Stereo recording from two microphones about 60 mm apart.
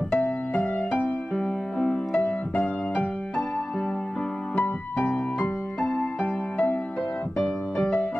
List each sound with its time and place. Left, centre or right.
0.1 s music: centre
4.9 s music: left
5.4 s music: centre
7.3 s music: centre